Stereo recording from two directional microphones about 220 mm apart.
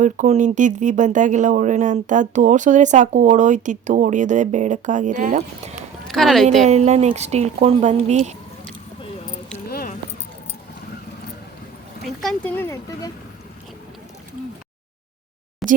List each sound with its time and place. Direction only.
0.0 s speech: 35° right (ahead or behind)
6.1 s speech: centre (ahead or behind)
6.7 s speech: 30° right (ahead or behind)
9.6 s a sound: 45° left (ahead or behind)
12.0 s speech: centre (ahead or behind)
15.6 s a sound: centre (ahead or behind)